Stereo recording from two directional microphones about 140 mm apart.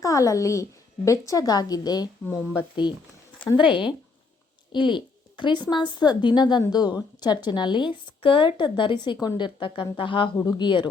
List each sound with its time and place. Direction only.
0.0 s a woman's voice: 25° left (ahead or behind)
2.2 s speech: 15° left (ahead or behind)
2.8 s speech: 30° left (ahead or behind)